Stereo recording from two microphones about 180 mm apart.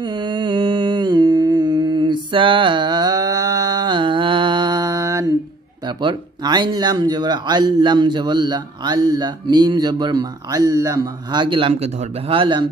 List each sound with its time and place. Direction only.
0.0 s mantra: 25° right (ahead or behind)
2.3 s a sound: 30° right (ahead or behind)
5.9 s a man's voice: 25° right (ahead or behind)